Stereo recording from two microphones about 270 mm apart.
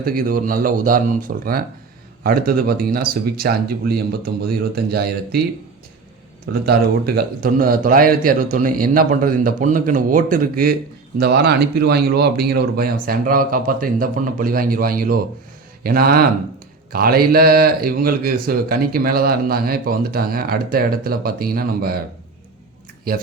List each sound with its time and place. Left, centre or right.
0.0 s a man's voice: right
6.5 s a man's voice: right
23.1 s a man's voice: right